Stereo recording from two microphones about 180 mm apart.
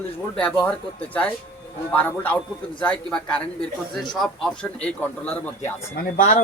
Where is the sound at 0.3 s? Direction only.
5° left (ahead or behind).